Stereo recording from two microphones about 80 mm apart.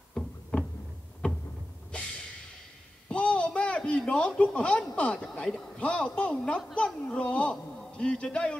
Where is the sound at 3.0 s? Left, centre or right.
Centre.